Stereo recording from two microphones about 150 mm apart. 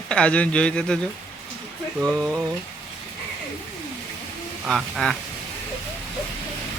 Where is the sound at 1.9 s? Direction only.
Centre (ahead or behind).